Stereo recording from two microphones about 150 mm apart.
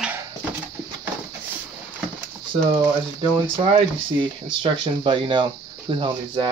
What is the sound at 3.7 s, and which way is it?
Speech, 35° right (ahead or behind).